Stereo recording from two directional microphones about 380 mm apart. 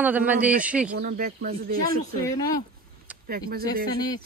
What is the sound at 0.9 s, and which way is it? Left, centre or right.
Speech, right.